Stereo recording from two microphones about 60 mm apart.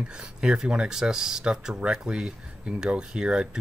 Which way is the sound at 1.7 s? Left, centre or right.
Centre.